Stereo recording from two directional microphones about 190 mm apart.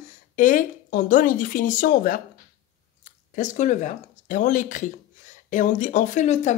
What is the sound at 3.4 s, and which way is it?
Speech, 40° left (ahead or behind).